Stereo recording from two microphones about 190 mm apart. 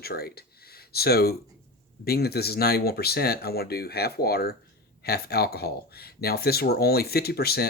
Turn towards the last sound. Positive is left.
turn(degrees=55)  # may be behind; listen again after turning